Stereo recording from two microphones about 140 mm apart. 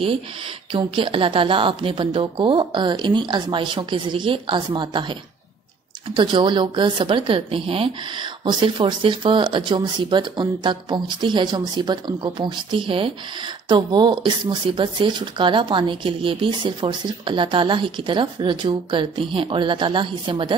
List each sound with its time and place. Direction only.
0.7 s speech: 40° right (ahead or behind)
6.1 s speech: 35° right (ahead or behind)